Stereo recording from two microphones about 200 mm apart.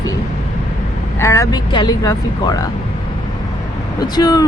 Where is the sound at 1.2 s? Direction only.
15° left (ahead or behind).